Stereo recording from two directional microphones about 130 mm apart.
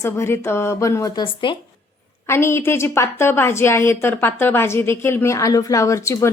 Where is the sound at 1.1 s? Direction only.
35° left (ahead or behind).